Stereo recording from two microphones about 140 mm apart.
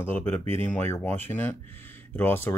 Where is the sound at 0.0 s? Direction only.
15° left (ahead or behind).